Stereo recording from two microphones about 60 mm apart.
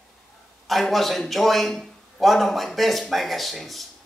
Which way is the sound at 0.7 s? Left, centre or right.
Centre.